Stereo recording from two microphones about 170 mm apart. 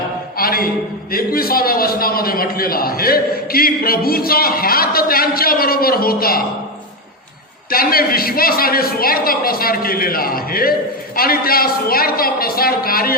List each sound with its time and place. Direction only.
0.3 s a sound: 60° left (ahead or behind)
1.1 s a man's voice: 60° left (ahead or behind)
7.7 s a man's voice: 60° left (ahead or behind)